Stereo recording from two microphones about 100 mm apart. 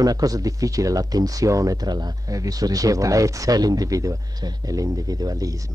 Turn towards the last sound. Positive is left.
turn(degrees=-35)  # may be behind; listen again after turning